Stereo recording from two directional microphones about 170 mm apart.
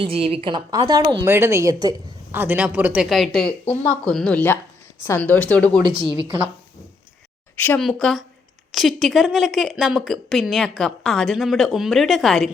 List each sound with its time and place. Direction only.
0.0 s a woman's voice: 35° right (ahead or behind)
1.3 s speech: 15° right (ahead or behind)
2.4 s speech: 10° right (ahead or behind); by 5.8 s 10° left (ahead or behind)
6.0 s a woman's voice: 25° left (ahead or behind)
7.5 s a woman's voice: 10° left (ahead or behind)